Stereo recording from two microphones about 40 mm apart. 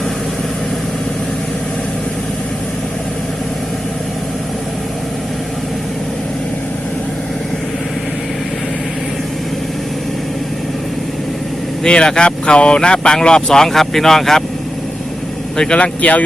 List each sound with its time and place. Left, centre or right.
11.8 s speech: left
15.5 s speech: centre
15.8 s speech: left